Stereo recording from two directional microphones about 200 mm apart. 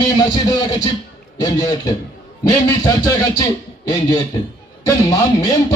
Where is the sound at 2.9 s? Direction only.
15° left (ahead or behind).